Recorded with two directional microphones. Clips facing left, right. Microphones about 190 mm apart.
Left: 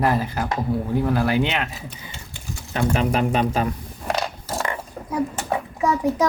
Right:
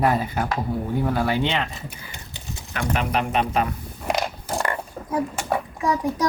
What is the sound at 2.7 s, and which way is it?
Speech, 30° left (ahead or behind).